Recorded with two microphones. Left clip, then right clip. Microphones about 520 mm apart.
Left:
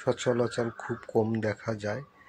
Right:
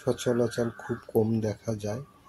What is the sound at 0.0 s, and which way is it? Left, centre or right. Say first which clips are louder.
Speech: even; right.